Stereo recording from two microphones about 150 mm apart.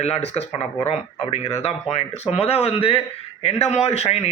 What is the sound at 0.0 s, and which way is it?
A man's voice, 45° left (ahead or behind).